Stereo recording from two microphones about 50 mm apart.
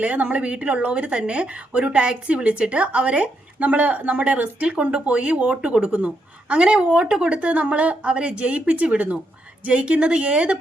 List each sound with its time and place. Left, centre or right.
0.0 s a woman's voice: right